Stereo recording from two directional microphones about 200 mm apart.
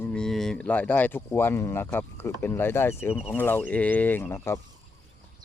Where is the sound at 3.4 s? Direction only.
10° left (ahead or behind).